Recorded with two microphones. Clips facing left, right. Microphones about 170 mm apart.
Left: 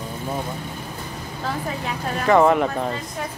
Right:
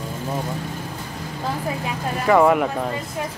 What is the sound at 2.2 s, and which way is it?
Speech, 5° right (ahead or behind).